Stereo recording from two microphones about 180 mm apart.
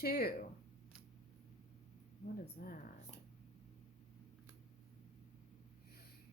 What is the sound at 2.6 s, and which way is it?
Speech, 50° left (ahead or behind).